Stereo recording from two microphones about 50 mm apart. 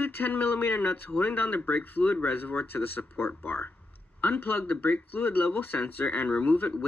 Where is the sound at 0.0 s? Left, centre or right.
Left.